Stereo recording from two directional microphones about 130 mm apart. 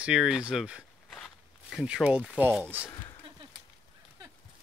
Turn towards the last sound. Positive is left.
turn(degrees=35)  # may be behind; listen again after turning